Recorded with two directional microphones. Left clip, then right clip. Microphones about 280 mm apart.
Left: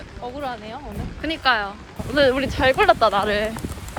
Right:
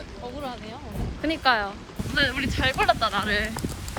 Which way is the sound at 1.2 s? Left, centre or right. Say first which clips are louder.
Left 2 dB; centre.